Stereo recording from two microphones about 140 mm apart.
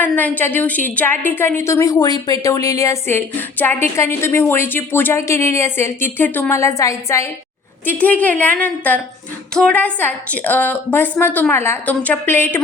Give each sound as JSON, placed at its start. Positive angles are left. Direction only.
{"t": 0.0, "sound": "a woman's voice", "side_deg": 10}
{"t": 7.9, "sound": "a woman's voice", "side_deg": 10}